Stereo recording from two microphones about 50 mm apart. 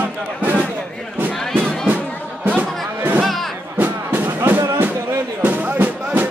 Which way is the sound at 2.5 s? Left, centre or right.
Right.